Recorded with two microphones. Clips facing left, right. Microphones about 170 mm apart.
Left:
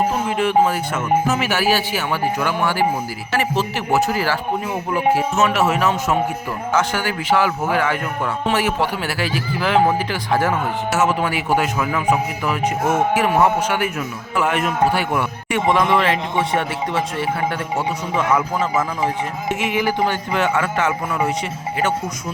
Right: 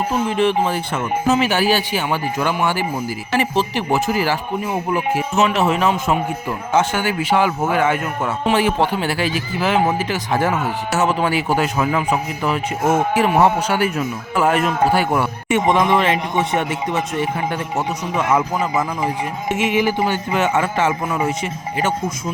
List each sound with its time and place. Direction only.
0.3 s speech: 30° right (ahead or behind)
5.4 s speech: 30° right (ahead or behind)
15.4 s speech: 20° right (ahead or behind)
18.6 s speech: 15° right (ahead or behind)